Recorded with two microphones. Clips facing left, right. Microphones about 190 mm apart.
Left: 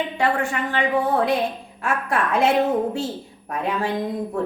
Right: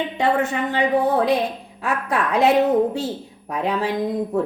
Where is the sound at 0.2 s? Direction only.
20° right (ahead or behind).